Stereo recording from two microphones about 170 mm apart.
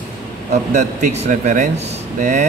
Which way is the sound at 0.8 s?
45° right (ahead or behind).